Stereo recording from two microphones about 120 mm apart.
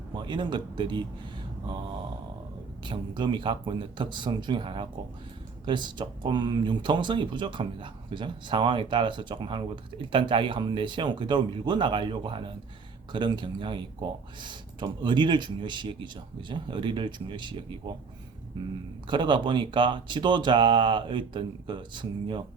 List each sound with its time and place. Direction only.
0.1 s speech: 40° right (ahead or behind)
2.8 s speech: 40° right (ahead or behind)
19.0 s speech: 40° right (ahead or behind)